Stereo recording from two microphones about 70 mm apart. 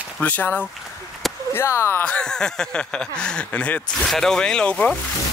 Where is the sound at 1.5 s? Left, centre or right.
Left.